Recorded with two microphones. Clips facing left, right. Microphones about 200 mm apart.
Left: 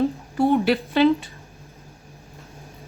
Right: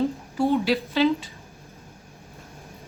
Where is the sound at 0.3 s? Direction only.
55° left (ahead or behind).